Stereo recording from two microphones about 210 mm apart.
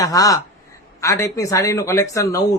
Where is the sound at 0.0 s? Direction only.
15° left (ahead or behind).